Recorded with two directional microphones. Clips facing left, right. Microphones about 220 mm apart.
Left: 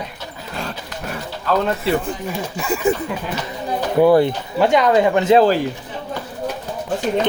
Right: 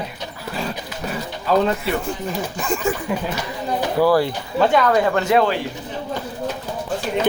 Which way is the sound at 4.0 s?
20° left (ahead or behind).